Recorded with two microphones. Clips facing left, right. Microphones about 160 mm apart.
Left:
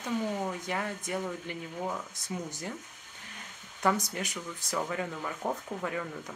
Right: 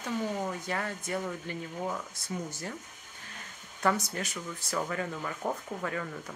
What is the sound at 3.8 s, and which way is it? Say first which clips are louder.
Speech: even; 15° left (ahead or behind).